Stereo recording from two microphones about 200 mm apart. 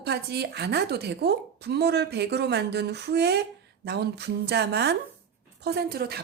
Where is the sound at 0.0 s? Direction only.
55° right (ahead or behind).